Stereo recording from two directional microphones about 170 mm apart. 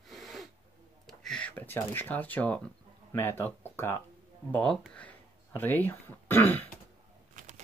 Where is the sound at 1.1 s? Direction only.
5° left (ahead or behind).